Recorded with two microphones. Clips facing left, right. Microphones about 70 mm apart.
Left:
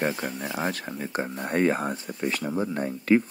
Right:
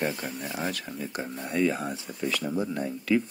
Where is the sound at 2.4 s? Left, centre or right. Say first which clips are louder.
Left 2 dB; left.